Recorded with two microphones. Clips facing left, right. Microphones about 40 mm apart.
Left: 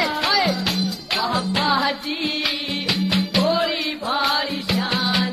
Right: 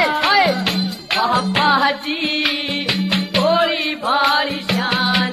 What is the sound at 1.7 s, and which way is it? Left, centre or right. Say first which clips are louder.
Music: right 5 dB; right.